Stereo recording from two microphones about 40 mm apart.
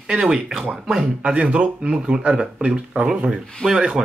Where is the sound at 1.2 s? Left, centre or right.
Right.